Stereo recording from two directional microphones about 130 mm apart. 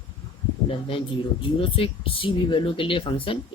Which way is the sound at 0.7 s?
45° left (ahead or behind).